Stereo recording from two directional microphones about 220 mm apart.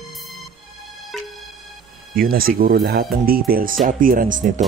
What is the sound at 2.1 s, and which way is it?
Speech, 40° right (ahead or behind).